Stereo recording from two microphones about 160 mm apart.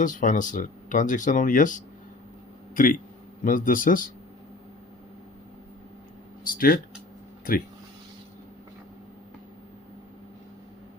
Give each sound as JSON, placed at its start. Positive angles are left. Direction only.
{"t": 0.0, "sound": "a man's voice", "side_deg": 55}
{"t": 6.4, "sound": "speech", "side_deg": 60}